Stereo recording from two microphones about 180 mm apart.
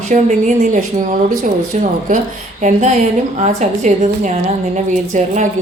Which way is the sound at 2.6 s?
40° right (ahead or behind).